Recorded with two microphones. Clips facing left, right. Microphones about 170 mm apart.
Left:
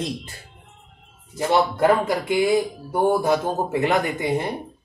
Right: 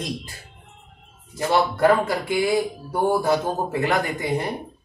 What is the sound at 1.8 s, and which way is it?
Speech, 20° left (ahead or behind).